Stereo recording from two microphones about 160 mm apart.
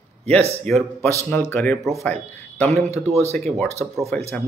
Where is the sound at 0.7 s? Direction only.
5° left (ahead or behind).